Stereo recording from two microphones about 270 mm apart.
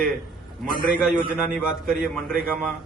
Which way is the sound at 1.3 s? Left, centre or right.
Centre.